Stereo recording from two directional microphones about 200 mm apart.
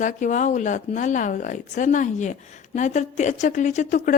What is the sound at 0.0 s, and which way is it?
A woman's voice, 40° left (ahead or behind).